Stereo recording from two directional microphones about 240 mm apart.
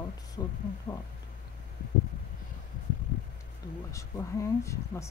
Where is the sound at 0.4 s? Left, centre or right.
Centre.